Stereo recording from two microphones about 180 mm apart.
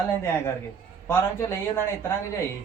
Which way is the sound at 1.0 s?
15° left (ahead or behind).